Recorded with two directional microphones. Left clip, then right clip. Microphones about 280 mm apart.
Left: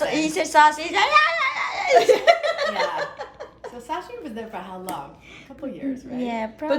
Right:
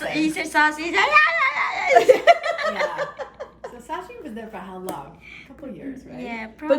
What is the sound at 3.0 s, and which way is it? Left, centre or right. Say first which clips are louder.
Chuckle: right 1 dB; right.